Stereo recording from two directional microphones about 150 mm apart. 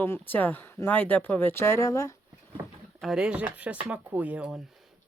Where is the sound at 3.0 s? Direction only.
5° right (ahead or behind).